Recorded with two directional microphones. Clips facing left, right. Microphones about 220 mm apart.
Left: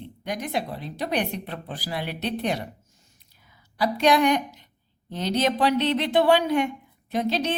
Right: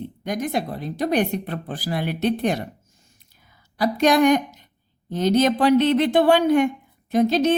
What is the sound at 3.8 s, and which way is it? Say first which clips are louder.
A woman's voice: right 3 dB; 45° right (ahead or behind).